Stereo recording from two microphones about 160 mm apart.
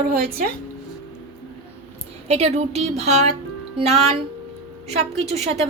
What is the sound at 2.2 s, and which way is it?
A woman's voice, 40° right (ahead or behind).